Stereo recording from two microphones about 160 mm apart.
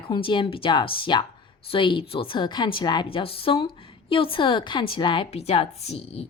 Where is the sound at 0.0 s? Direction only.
30° left (ahead or behind).